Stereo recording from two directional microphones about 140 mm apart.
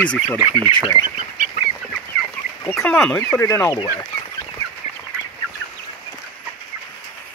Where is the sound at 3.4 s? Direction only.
20° left (ahead or behind).